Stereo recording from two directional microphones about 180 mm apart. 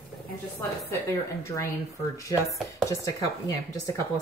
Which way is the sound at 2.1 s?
15° left (ahead or behind).